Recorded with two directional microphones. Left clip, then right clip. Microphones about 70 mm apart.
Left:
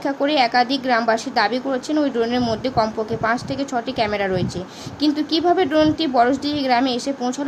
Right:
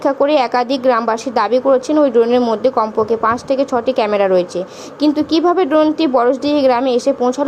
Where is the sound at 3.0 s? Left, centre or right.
Right.